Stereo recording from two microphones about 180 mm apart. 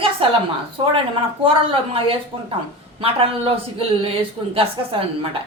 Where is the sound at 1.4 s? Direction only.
30° right (ahead or behind).